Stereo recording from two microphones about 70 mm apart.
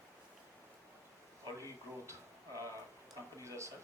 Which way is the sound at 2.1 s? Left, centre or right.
Right.